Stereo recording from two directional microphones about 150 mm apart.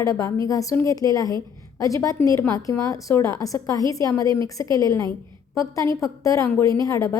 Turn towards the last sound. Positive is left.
turn(degrees=20)  # may be behind; listen again after turning